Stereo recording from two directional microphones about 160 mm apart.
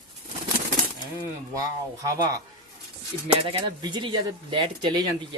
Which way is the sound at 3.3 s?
30° right (ahead or behind).